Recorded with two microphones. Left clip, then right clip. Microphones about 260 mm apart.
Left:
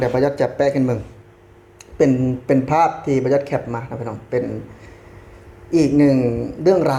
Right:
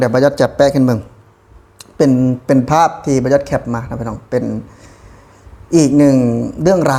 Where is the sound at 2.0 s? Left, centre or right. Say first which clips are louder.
Right 4 dB; right.